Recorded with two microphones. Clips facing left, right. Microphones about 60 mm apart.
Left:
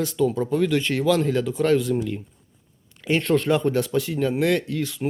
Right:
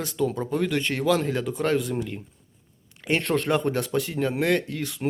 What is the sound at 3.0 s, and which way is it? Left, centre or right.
Speech, right.